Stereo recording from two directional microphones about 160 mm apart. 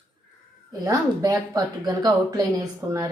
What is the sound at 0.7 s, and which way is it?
Speech, 25° right (ahead or behind).